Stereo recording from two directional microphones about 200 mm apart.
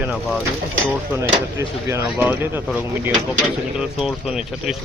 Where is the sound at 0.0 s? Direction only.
5° right (ahead or behind).